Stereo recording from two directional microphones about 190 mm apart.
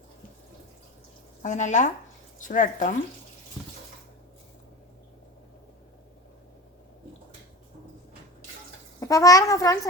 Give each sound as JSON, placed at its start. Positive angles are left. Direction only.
{"t": 1.4, "sound": "speech", "side_deg": 40}
{"t": 9.0, "sound": "a child's voice", "side_deg": 15}